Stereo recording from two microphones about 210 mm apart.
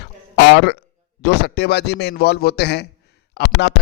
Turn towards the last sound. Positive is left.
turn(degrees=55)  # may be behind; listen again after turning